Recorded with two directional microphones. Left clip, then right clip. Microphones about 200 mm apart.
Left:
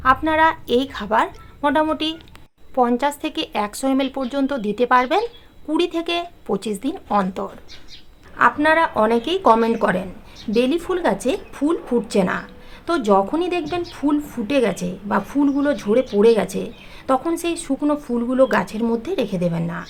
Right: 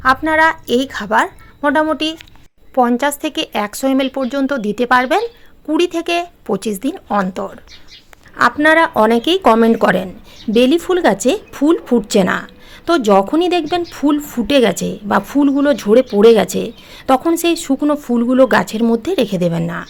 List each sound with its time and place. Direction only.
0.0 s a woman's voice: 25° right (ahead or behind)